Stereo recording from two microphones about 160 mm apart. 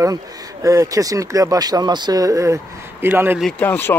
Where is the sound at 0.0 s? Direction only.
20° right (ahead or behind).